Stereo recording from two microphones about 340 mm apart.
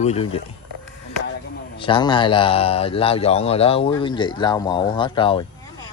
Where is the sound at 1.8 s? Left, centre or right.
Centre.